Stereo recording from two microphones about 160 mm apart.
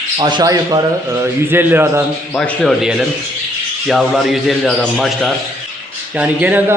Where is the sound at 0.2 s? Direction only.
30° right (ahead or behind); by 2.0 s 15° right (ahead or behind).